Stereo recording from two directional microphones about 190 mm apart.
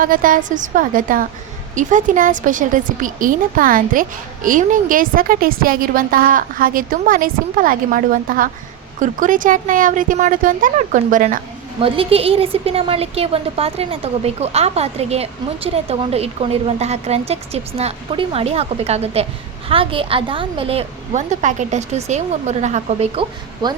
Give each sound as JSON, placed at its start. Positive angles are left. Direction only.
{"t": 0.0, "sound": "a woman's voice", "side_deg": -45}
{"t": 11.8, "sound": "a woman's voice", "side_deg": -30}
{"t": 23.6, "sound": "a woman's voice", "side_deg": -20}